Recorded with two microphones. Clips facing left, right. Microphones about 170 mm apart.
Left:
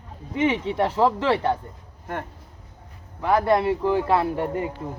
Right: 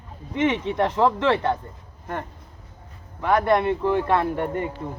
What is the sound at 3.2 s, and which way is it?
Speech, 10° left (ahead or behind).